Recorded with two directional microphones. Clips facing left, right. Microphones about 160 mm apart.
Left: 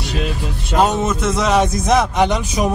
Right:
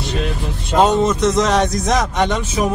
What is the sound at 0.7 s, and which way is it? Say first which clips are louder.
A man's voice: right 3 dB; 5° left (ahead or behind).